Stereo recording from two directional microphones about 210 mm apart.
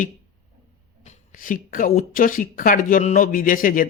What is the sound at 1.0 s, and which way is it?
Speech, 35° left (ahead or behind).